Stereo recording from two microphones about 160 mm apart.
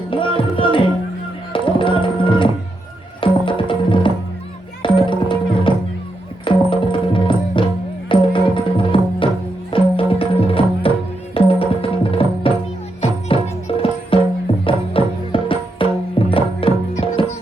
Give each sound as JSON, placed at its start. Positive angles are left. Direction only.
{"t": 0.1, "sound": "music", "side_deg": 30}